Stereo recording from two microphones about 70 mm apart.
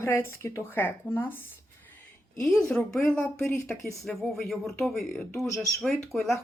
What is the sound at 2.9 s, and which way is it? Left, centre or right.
Speech, centre.